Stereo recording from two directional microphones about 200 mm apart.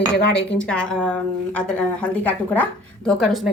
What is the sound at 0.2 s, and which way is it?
Speech, 55° left (ahead or behind).